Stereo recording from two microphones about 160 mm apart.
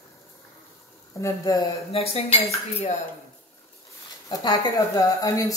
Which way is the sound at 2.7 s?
45° left (ahead or behind).